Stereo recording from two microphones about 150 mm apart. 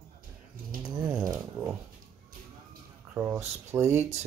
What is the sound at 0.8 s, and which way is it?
Speech, 25° right (ahead or behind).